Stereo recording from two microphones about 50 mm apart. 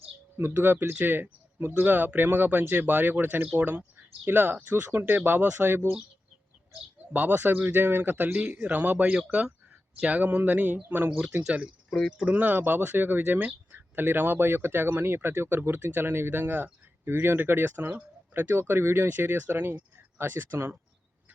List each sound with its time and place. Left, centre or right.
0.4 s speech: right
7.1 s speech: right
10.8 s speech: right
11.1 s speech: right
11.9 s speech: centre
12.2 s speech: right